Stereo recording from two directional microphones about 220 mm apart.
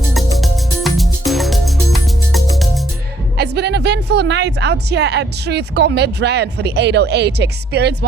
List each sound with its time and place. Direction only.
0.3 s music: centre (ahead or behind)
3.3 s speech: 50° right (ahead or behind)